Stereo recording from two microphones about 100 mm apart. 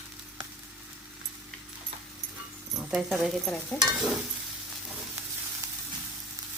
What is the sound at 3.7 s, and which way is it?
Speech, 15° left (ahead or behind).